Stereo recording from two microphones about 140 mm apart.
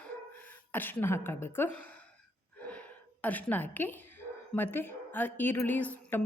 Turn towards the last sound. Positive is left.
turn(degrees=10)  # may be behind; listen again after turning